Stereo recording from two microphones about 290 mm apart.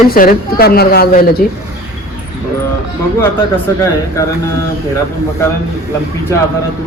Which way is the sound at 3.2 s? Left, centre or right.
Centre.